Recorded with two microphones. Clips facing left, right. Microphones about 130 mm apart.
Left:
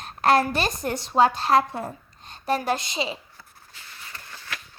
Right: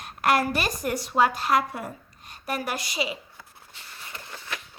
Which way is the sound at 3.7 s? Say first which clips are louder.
Right 1 dB; 20° right (ahead or behind).